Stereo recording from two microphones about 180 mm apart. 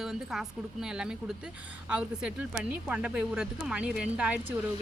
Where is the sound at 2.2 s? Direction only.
5° right (ahead or behind).